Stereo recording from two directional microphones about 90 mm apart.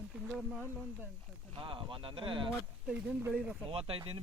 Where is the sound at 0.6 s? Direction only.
20° right (ahead or behind).